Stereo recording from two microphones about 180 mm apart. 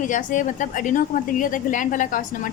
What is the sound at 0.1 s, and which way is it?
A woman's voice, 45° left (ahead or behind).